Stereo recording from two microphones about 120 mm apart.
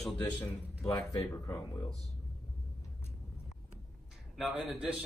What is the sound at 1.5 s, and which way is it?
Speech, 25° left (ahead or behind).